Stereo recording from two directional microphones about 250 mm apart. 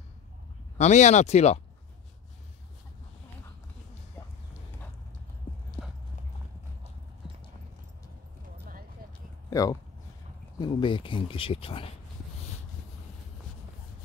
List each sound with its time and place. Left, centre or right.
0.7 s speech: left
9.5 s speech: centre